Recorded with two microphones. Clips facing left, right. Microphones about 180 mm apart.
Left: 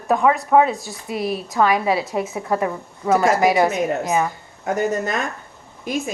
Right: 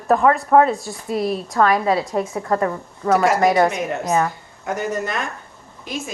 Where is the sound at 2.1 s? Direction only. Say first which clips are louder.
Right 1 dB; 20° left (ahead or behind).